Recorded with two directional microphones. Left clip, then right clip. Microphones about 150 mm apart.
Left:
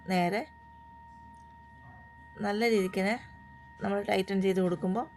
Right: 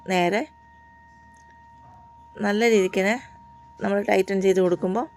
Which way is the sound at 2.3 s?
30° right (ahead or behind).